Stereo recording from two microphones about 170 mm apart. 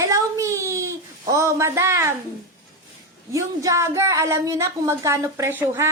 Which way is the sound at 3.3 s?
20° right (ahead or behind).